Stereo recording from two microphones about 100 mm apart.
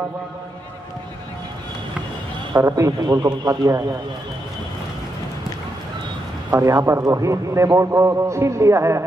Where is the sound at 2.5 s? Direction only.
30° right (ahead or behind).